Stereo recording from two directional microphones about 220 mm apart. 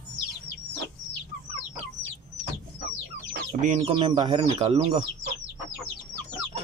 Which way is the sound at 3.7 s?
20° right (ahead or behind).